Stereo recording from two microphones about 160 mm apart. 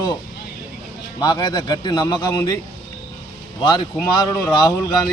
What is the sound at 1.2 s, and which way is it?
A man's voice, 25° left (ahead or behind).